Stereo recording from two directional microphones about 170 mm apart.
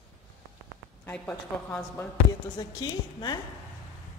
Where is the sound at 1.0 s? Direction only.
10° left (ahead or behind).